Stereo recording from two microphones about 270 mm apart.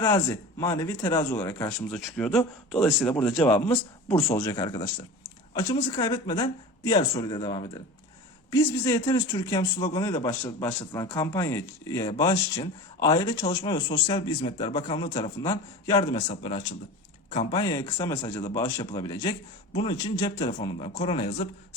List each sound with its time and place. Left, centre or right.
0.0 s speech: centre